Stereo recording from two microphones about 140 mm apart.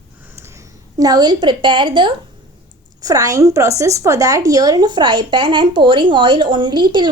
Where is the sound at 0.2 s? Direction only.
15° right (ahead or behind); by 2.1 s 35° right (ahead or behind).